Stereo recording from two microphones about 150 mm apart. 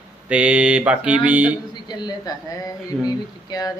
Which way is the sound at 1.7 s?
30° left (ahead or behind).